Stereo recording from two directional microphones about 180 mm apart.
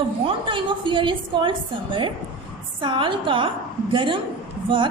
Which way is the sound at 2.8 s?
25° right (ahead or behind).